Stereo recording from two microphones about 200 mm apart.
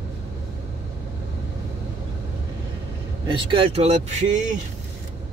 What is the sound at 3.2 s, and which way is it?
Speech, 25° right (ahead or behind).